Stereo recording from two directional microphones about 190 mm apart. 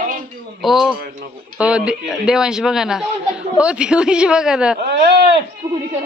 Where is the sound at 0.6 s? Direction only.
Centre (ahead or behind).